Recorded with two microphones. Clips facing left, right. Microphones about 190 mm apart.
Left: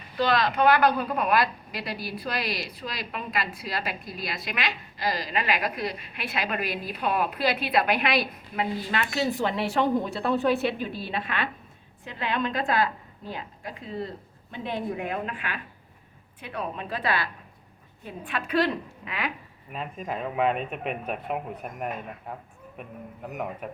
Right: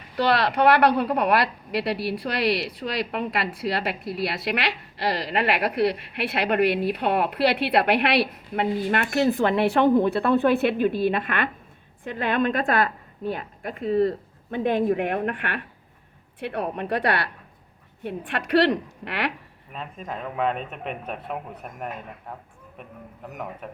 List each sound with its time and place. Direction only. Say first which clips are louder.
0.2 s a woman's voice: right 2 dB; 70° right (ahead or behind)
18.0 s a woman's voice: right 4 dB; 70° right (ahead or behind)
19.7 s a man's voice: left 1 dB; 5° left (ahead or behind)
23.6 s a man's voice: left 2 dB; 5° left (ahead or behind)